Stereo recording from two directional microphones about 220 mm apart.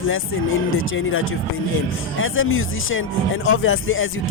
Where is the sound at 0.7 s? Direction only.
65° left (ahead or behind).